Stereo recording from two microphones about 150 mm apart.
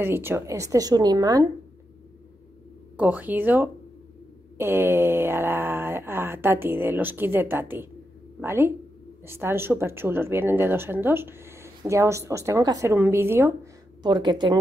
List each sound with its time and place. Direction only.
0.0 s a woman's voice: 15° right (ahead or behind)
3.0 s speech: 10° right (ahead or behind)
14.0 s a woman's voice: 30° right (ahead or behind)